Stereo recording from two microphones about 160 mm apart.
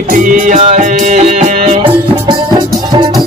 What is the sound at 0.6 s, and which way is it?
Music, 45° right (ahead or behind).